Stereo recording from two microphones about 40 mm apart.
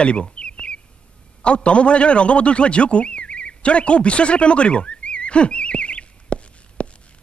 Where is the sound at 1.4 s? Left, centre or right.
Left.